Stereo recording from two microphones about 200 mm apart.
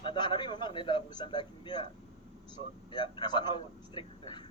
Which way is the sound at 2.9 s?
20° left (ahead or behind).